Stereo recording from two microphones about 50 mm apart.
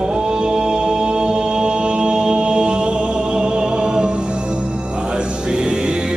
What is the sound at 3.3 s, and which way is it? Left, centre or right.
Music, centre.